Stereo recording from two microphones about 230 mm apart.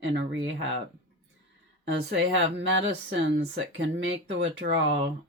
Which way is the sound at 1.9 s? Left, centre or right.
Right.